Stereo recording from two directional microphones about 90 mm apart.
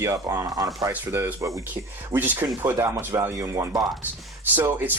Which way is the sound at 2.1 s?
20° right (ahead or behind).